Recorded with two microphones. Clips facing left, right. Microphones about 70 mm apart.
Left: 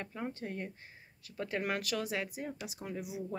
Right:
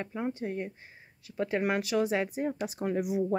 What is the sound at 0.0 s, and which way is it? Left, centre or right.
Speech, centre.